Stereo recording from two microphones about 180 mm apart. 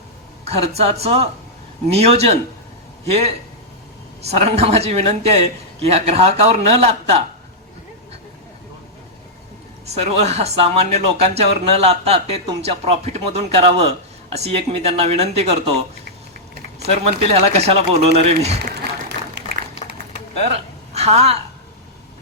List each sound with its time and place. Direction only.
0.4 s speech: 35° right (ahead or behind)
9.8 s speech: 35° right (ahead or behind)
16.8 s speech: 35° right (ahead or behind)
18.6 s run: 65° right (ahead or behind)
20.5 s a sound: 35° right (ahead or behind)